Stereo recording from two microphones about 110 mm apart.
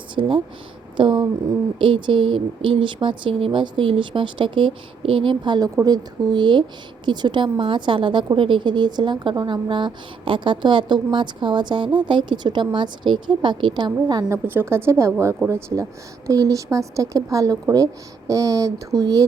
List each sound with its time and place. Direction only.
0.2 s a woman's voice: 50° right (ahead or behind); by 9.6 s 35° right (ahead or behind)
9.6 s speech: 50° right (ahead or behind)
14.3 s a woman's voice: 20° right (ahead or behind)